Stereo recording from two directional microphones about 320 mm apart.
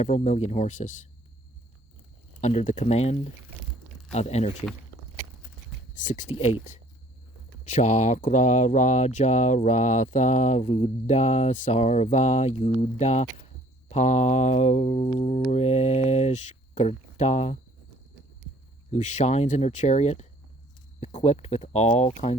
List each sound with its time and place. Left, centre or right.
0.0 s mantra: left
2.4 s mantra: left
6.0 s mantra: left
18.9 s mantra: left